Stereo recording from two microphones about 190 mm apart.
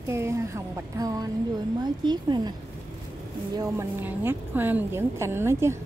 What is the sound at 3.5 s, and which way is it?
Speech, 15° right (ahead or behind).